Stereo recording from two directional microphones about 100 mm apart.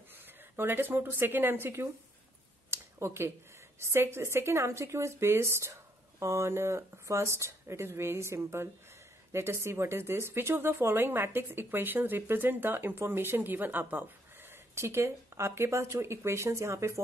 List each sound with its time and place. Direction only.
0.6 s a woman's voice: 20° right (ahead or behind)
2.7 s a sound: 25° right (ahead or behind)
3.8 s a woman's voice: 25° right (ahead or behind)